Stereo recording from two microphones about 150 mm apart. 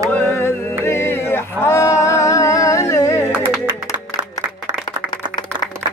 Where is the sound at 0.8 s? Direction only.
15° left (ahead or behind).